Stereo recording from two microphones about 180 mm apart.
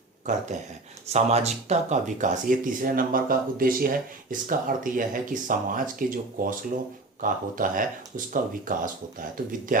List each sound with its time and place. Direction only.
0.3 s speech: 45° right (ahead or behind)